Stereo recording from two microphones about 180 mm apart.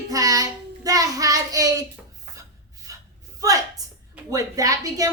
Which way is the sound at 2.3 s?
20° right (ahead or behind).